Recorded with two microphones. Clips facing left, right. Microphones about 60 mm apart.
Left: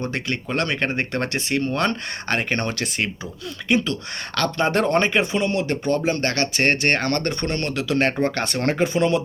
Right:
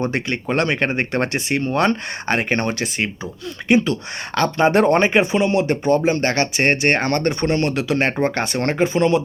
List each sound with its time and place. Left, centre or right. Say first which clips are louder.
0.0 s speech: right 4 dB; centre
8.6 s speech: right 2 dB; centre